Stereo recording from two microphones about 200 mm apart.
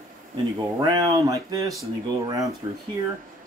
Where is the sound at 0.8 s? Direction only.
20° right (ahead or behind).